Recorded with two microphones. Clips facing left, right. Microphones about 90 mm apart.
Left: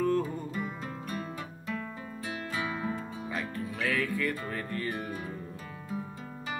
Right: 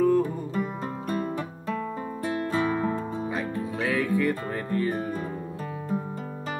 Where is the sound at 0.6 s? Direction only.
50° right (ahead or behind).